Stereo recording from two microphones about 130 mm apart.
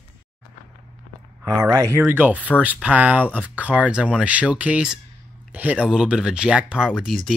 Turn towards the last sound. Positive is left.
turn(degrees=0)  # may be behind; listen again after turning